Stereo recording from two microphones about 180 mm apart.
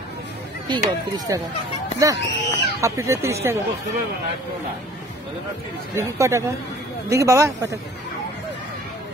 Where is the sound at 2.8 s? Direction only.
15° right (ahead or behind).